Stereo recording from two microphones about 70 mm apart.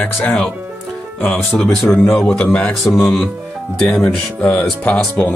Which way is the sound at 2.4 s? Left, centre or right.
Centre.